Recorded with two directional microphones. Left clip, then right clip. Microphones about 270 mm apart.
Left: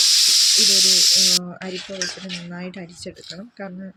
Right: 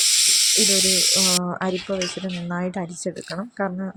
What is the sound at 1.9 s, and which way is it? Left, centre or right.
Speech, centre.